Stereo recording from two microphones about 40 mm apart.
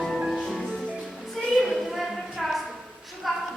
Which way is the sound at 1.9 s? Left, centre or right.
Centre.